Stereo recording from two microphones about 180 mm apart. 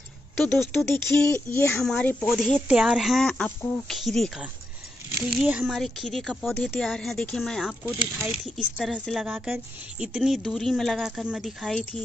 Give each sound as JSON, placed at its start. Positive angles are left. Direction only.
{"t": 0.6, "sound": "speech", "side_deg": -20}
{"t": 1.8, "sound": "speech", "side_deg": 5}
{"t": 7.8, "sound": "speech", "side_deg": -10}